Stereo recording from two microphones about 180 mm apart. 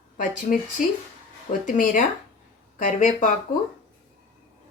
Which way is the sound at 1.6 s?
45° left (ahead or behind).